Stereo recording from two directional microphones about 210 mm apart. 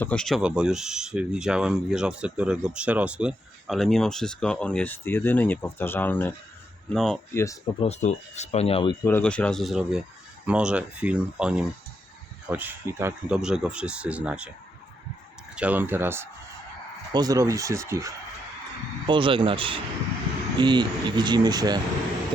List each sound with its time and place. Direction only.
0.0 s speech: 5° left (ahead or behind)
7.4 s speech: 25° left (ahead or behind)
9.0 s speech: 5° left (ahead or behind)
15.5 s speech: 5° right (ahead or behind)